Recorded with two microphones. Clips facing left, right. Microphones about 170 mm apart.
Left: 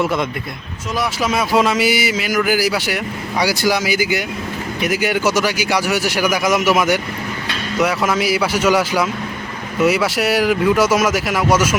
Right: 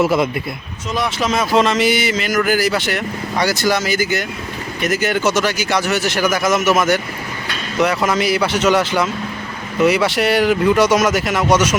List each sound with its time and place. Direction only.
0.0 s speech: 5° right (ahead or behind)
0.9 s speech: 5° left (ahead or behind)